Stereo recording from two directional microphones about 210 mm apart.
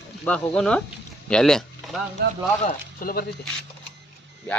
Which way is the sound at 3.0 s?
45° left (ahead or behind).